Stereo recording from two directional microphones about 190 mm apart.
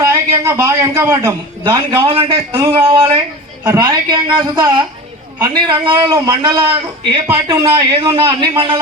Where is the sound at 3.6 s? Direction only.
15° right (ahead or behind).